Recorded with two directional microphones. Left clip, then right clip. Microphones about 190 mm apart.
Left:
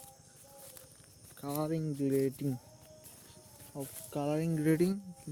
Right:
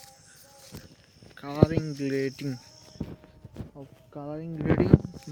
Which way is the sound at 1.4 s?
10° left (ahead or behind).